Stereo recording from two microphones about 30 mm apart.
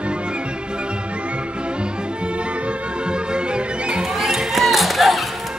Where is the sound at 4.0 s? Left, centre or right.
Centre.